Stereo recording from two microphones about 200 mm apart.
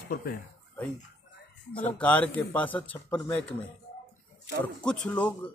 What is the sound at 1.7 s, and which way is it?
Speech, 5° left (ahead or behind).